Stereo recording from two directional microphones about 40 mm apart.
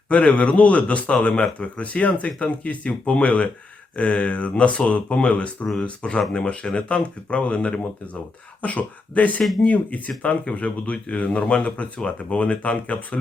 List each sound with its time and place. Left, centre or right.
0.1 s speech: left
5.8 s speech: left
9.4 s speech: centre
10.2 s speech: left
10.9 s speech: left